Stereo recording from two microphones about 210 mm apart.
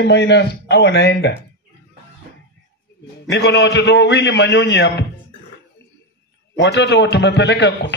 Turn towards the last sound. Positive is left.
turn(degrees=55)  # may be behind; listen again after turning